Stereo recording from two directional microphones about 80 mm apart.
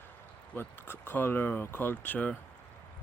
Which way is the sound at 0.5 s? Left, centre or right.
Left.